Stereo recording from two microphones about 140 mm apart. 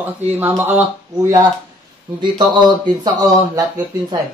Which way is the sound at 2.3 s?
30° right (ahead or behind).